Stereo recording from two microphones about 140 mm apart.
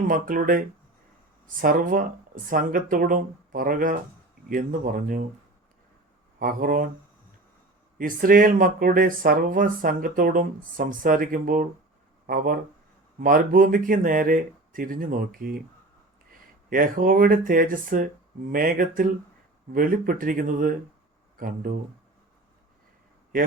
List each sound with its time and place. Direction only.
0.1 s speech: 80° right
6.4 s speech: 90° right
7.9 s speech: 85° right
12.2 s speech: 90° right
13.1 s speech: 80° right
16.6 s speech: 85° right; by 20.7 s 70° right (ahead or behind)
21.3 s speech: 90° right